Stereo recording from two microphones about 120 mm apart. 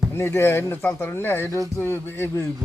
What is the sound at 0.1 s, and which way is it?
Speech, 20° left (ahead or behind).